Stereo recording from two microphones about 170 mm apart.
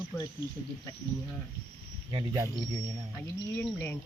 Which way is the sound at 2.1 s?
20° right (ahead or behind).